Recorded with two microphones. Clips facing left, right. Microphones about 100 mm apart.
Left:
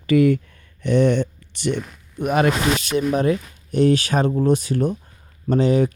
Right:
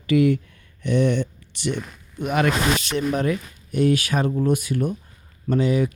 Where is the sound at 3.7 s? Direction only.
35° left (ahead or behind).